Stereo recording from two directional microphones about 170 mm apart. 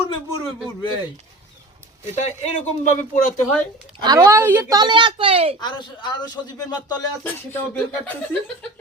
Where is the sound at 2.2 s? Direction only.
45° left (ahead or behind).